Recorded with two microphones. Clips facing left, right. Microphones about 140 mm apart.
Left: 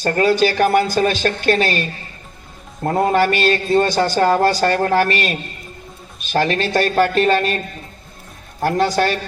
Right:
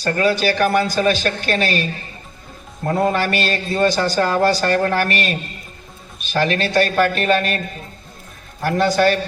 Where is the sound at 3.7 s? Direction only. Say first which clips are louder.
Even; 45° left (ahead or behind).